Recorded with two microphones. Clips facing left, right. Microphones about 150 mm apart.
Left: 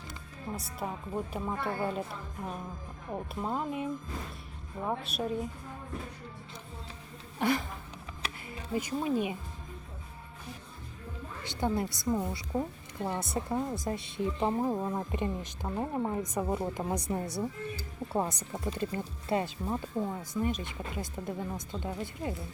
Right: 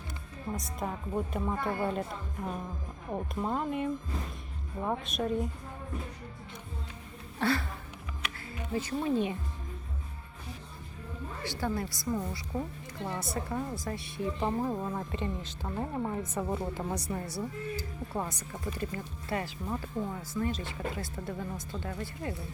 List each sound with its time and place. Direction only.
0.5 s music: centre (ahead or behind)
0.8 s speech: centre (ahead or behind)
3.1 s speech: centre (ahead or behind)
4.9 s speech: centre (ahead or behind)
7.3 s speech: 15° left (ahead or behind)
8.7 s a woman's voice: 15° left (ahead or behind)
11.4 s a woman's voice: 20° left (ahead or behind)